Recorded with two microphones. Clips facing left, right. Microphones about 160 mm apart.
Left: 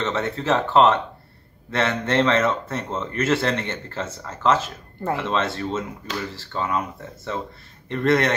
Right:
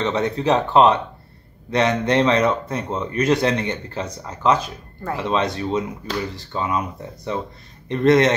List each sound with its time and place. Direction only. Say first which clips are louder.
0.0 s speech: right 4 dB; 15° right (ahead or behind)